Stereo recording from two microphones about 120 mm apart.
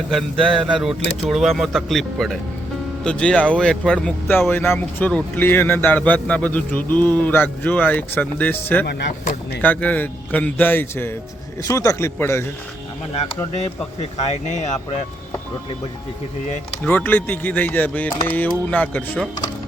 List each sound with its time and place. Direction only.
0.1 s speech: centre (ahead or behind); by 12.5 s 20° left (ahead or behind)
14.0 s speech: 75° left (ahead or behind)
16.8 s speech: 15° left (ahead or behind)